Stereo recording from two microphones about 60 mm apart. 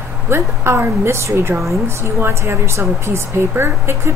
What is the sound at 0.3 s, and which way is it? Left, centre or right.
A woman's voice, right.